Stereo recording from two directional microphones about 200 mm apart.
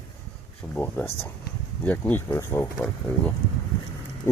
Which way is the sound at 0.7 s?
10° left (ahead or behind).